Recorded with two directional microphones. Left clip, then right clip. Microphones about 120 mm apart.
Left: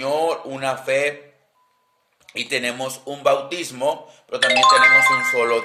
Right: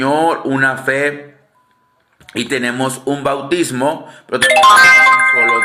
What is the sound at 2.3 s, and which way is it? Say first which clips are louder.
Speech: right 6 dB; 25° left (ahead or behind).